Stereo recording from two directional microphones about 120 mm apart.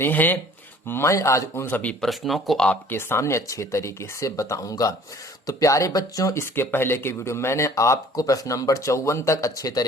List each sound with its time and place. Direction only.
0.0 s speech: 15° left (ahead or behind)
2.9 s speech: 20° left (ahead or behind)